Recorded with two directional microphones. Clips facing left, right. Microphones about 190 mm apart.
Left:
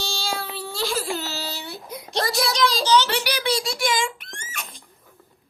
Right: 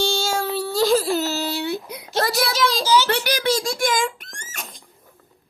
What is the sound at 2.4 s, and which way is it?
Child singing, centre (ahead or behind).